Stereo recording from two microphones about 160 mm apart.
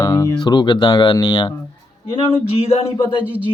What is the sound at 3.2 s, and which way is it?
Speech, 10° right (ahead or behind).